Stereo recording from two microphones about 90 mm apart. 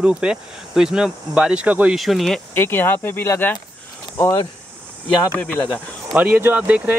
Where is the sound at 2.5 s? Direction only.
25° left (ahead or behind).